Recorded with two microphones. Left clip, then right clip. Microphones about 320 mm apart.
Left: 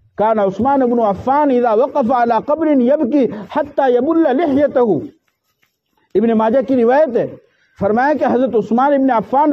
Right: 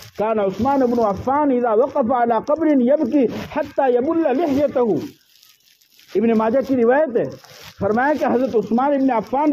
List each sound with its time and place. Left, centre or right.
0.2 s speech: left
6.1 s speech: left